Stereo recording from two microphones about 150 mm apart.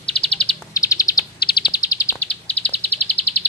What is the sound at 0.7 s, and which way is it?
Bird, 20° left (ahead or behind).